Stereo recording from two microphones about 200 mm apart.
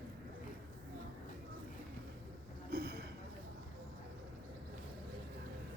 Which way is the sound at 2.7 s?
50° right (ahead or behind).